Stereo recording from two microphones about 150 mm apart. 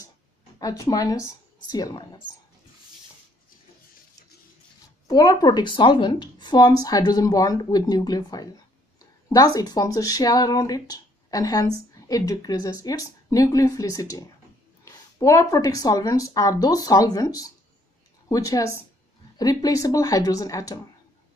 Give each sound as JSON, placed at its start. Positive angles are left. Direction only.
{"t": 0.6, "sound": "speech", "side_deg": 25}
{"t": 5.0, "sound": "a woman's voice", "side_deg": 25}